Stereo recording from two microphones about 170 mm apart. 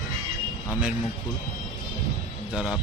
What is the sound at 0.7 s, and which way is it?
Speech, 5° right (ahead or behind).